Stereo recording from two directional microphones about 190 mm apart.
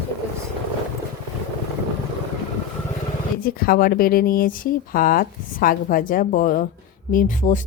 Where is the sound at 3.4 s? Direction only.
50° left (ahead or behind).